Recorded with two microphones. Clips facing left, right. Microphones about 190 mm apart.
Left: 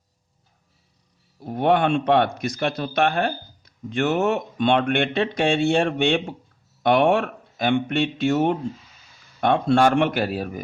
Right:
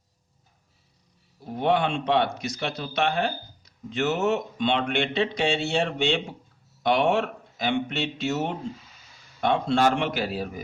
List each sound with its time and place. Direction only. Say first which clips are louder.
1.5 s speech: left 4 dB; 55° left (ahead or behind)